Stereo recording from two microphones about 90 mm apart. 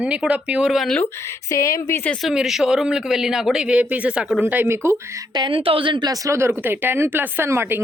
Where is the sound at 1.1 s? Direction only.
30° left (ahead or behind).